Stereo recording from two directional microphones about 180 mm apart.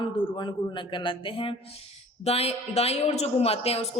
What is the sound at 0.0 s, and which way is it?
A man's voice, 25° left (ahead or behind).